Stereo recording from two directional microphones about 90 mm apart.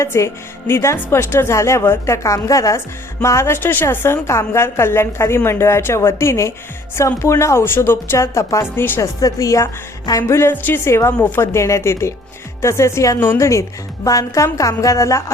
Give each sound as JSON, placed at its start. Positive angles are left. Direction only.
{"t": 0.0, "sound": "a woman's voice", "side_deg": 30}
{"t": 9.2, "sound": "a woman's voice", "side_deg": 35}
{"t": 10.1, "sound": "music", "side_deg": 45}
{"t": 10.3, "sound": "a woman's voice", "side_deg": 25}